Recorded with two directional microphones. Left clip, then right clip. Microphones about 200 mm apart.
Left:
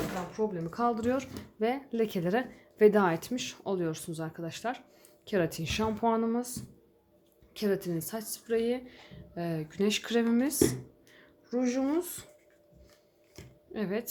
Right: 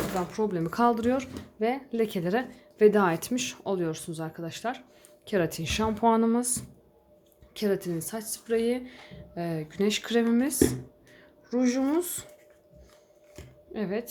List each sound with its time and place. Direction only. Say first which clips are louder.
0.3 s speech: right 4 dB; 50° right (ahead or behind)
0.7 s speech: right 7 dB; 30° right (ahead or behind)
0.9 s speech: right 3 dB; 5° right (ahead or behind)
7.5 s speech: right 3 dB; centre (ahead or behind)
13.3 s a sound: right 2 dB; centre (ahead or behind)